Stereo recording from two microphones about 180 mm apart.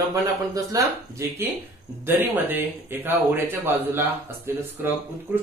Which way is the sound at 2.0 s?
10° right (ahead or behind).